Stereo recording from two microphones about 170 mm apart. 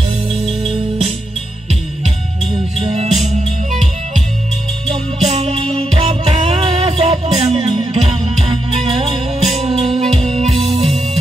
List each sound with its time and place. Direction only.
0.7 s music: 30° right (ahead or behind)
2.5 s music: 35° right (ahead or behind)
5.2 s music: 40° right (ahead or behind)